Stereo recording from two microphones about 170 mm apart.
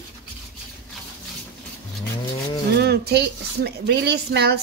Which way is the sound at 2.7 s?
75° right (ahead or behind).